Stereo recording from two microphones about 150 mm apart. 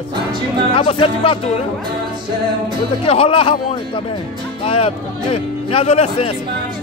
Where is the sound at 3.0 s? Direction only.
40° left (ahead or behind).